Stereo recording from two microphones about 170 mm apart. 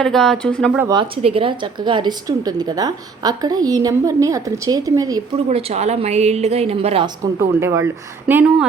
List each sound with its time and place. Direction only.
0.0 s speech: 5° left (ahead or behind)
0.9 s a woman's voice: 30° right (ahead or behind)
5.5 s a woman's voice: 40° right (ahead or behind)
7.3 s speech: 15° right (ahead or behind)